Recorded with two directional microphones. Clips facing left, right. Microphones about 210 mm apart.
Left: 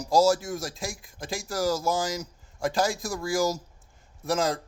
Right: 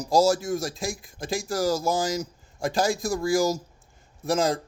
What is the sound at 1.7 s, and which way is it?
Speech, 15° right (ahead or behind).